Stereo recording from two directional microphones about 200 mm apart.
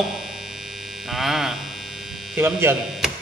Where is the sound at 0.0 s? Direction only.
Centre (ahead or behind).